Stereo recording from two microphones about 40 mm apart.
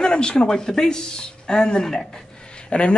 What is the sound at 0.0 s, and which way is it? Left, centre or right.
Speech, left.